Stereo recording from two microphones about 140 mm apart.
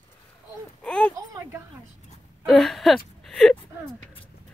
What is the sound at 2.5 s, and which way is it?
Speech, centre (ahead or behind).